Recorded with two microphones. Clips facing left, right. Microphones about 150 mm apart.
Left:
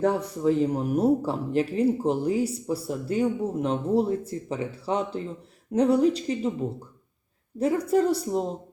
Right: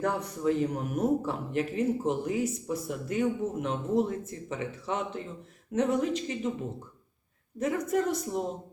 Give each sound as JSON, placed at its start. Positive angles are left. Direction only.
{"t": 0.0, "sound": "speech", "side_deg": 30}
{"t": 7.6, "sound": "speech", "side_deg": 30}